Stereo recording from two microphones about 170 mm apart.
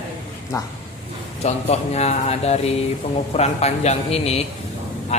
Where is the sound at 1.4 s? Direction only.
40° left (ahead or behind).